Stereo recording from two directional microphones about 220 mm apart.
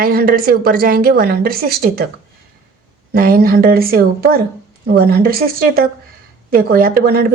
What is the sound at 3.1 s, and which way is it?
A woman's voice, 40° right (ahead or behind).